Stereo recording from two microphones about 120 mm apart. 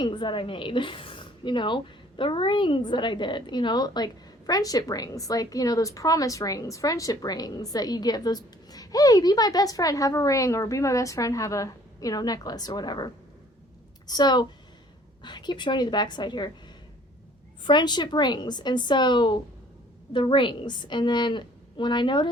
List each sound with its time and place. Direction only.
0.0 s speech: 40° left (ahead or behind)
14.1 s a woman's voice: 35° left (ahead or behind)